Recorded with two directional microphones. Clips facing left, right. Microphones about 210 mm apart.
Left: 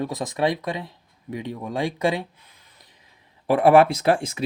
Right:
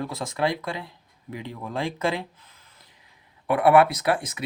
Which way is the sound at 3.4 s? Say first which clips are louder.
Left 3 dB; 25° left (ahead or behind).